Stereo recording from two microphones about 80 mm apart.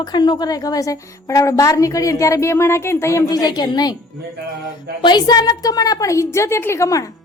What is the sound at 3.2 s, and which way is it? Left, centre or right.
A woman's voice, left.